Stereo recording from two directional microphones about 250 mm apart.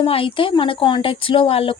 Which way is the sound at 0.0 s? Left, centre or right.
Left.